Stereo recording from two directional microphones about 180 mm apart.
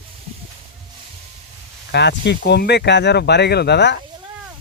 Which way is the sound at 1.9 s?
70° left (ahead or behind).